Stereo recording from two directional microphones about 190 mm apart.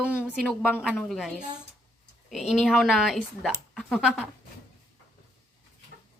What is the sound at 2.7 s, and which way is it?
A woman's voice, centre (ahead or behind).